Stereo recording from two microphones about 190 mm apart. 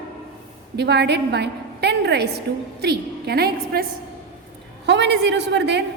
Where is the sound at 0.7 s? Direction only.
60° right (ahead or behind).